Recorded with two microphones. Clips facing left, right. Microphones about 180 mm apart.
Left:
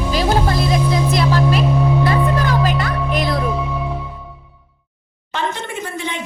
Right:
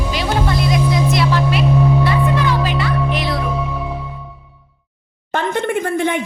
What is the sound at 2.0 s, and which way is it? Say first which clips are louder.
Music: even; 45° left (ahead or behind).